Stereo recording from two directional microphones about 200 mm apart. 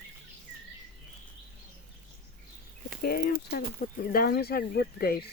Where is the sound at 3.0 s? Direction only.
50° left (ahead or behind).